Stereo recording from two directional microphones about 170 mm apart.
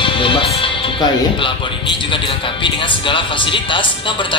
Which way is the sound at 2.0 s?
30° left (ahead or behind).